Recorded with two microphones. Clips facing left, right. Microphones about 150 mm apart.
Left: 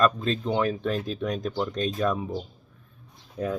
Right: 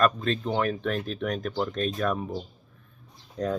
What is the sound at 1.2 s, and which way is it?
Speech, 15° left (ahead or behind).